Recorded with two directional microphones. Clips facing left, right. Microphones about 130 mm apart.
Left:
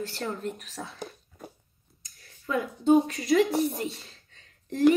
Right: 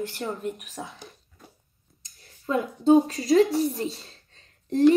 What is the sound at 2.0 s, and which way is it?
Speech, 30° right (ahead or behind).